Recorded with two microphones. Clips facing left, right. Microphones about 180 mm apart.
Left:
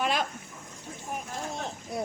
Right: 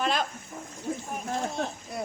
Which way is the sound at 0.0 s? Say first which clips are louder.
Right 1 dB; 10° left (ahead or behind).